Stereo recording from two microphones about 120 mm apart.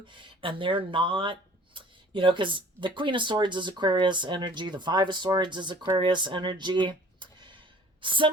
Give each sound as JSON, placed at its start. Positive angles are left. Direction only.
{"t": 0.1, "sound": "speech", "side_deg": -45}